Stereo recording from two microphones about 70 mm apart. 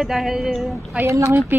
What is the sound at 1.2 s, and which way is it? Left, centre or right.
Speech, right.